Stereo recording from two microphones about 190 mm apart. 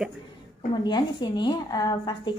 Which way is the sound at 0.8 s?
25° left (ahead or behind).